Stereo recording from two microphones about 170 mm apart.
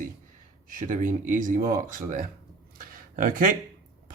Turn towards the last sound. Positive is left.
turn(degrees=-55)  # may be behind; listen again after turning